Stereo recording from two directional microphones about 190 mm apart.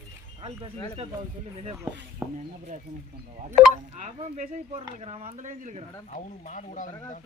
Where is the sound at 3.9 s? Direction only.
40° right (ahead or behind).